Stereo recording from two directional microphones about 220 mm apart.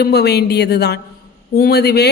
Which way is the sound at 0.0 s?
50° left (ahead or behind).